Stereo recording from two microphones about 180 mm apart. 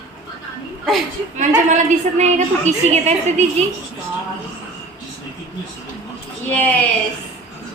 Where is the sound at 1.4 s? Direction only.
40° right (ahead or behind).